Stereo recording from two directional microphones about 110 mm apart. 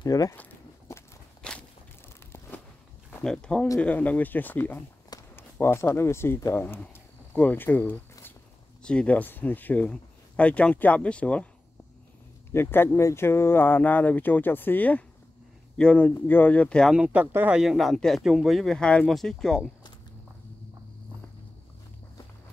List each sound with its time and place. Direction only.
0.0 s speech: 35° left (ahead or behind)
0.4 s walk: 20° left (ahead or behind)
1.4 s walk: 10° left (ahead or behind)
3.3 s speech: 10° left (ahead or behind)
5.3 s a sound: 25° left (ahead or behind)
5.9 s speech: 25° left (ahead or behind)
12.5 s speech: 20° left (ahead or behind)
16.9 s speech: 10° right (ahead or behind)
17.6 s speech: centre (ahead or behind)